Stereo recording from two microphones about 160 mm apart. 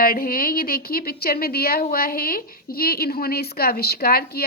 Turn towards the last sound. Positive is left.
turn(degrees=75)  # may be behind; listen again after turning